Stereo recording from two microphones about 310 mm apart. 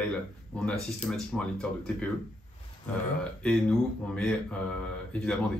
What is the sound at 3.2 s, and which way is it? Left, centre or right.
Speech, centre.